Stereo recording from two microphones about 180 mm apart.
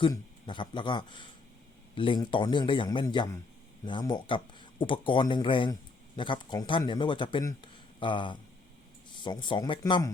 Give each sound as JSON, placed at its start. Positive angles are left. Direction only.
{"t": 0.0, "sound": "speech", "side_deg": 25}